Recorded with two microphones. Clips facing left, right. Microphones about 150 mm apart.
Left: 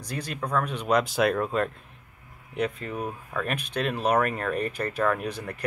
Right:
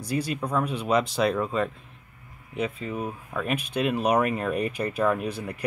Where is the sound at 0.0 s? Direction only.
10° right (ahead or behind).